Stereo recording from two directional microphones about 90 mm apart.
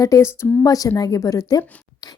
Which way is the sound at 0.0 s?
40° left (ahead or behind).